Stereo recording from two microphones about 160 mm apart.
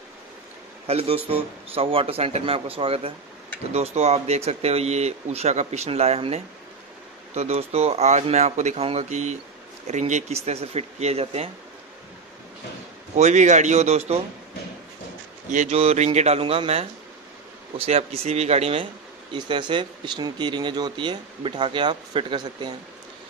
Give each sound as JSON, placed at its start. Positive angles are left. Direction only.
{"t": 0.8, "sound": "speech", "side_deg": -40}
{"t": 13.1, "sound": "speech", "side_deg": -50}
{"t": 15.5, "sound": "speech", "side_deg": -45}